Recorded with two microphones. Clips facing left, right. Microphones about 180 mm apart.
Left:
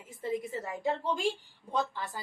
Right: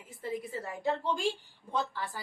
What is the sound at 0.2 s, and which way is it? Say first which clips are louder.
A woman's voice: left 3 dB; 20° left (ahead or behind).